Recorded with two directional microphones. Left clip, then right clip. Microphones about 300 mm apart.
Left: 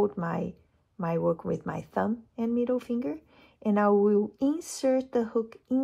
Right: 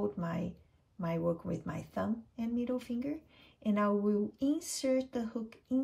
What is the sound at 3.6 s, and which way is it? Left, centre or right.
Speech, centre.